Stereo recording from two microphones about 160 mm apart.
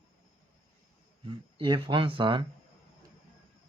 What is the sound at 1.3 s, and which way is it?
Speech, 30° right (ahead or behind).